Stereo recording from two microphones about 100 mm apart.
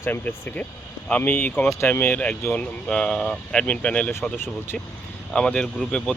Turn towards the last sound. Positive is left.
turn(degrees=10)  # may be behind; listen again after turning